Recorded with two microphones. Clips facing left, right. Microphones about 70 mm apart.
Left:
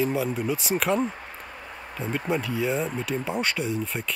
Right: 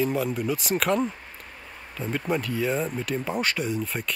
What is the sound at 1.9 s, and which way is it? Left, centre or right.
Speech, centre.